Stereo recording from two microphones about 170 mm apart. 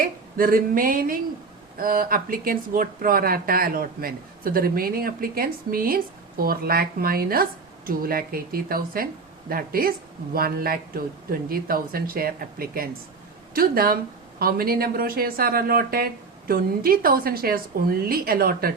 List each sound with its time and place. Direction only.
0.0 s speech: 55° right (ahead or behind)